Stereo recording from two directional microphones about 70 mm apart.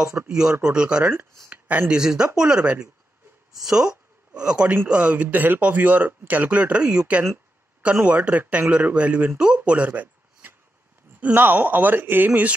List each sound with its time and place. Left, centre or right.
0.4 s speech: centre
9.6 s a sound: right
11.1 s speech: right